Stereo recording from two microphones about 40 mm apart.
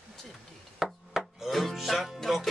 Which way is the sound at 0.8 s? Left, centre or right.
Centre.